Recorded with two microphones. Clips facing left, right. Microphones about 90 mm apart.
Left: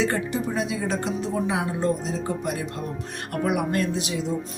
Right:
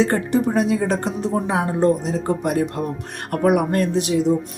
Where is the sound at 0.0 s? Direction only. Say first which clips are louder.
Right 6 dB; 50° right (ahead or behind).